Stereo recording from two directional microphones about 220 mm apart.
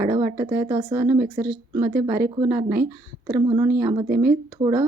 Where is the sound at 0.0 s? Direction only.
15° right (ahead or behind).